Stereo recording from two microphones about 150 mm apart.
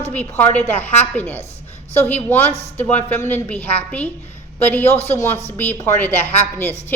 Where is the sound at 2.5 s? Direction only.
45° left (ahead or behind).